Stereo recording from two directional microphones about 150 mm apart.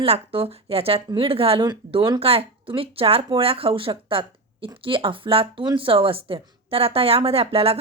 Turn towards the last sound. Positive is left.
turn(degrees=-40)  # may be behind; listen again after turning